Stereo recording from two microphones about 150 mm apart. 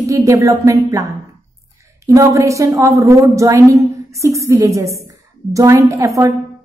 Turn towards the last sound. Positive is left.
turn(degrees=-20)  # may be behind; listen again after turning